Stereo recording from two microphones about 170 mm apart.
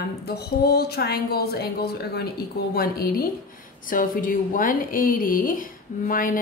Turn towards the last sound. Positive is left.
turn(degrees=55)  # may be behind; listen again after turning